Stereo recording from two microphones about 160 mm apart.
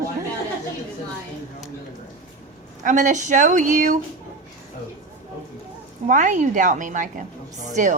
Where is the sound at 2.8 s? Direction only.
50° right (ahead or behind).